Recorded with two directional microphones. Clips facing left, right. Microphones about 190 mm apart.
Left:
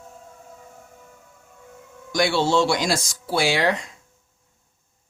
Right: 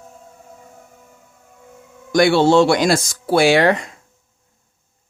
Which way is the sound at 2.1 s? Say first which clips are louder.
Right 7 dB; 55° right (ahead or behind).